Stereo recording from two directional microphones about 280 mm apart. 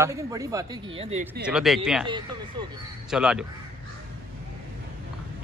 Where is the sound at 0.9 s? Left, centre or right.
Right.